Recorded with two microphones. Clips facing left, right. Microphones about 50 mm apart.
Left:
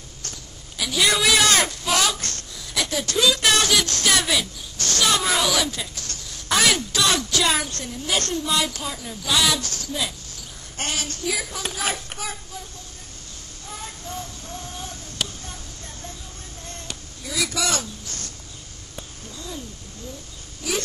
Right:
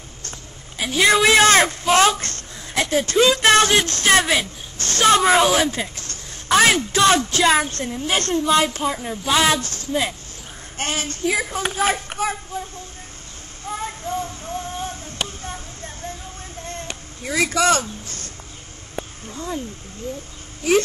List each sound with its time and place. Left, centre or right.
0.7 s a child's voice: right
13.7 s a sound: right
20.6 s a child's voice: right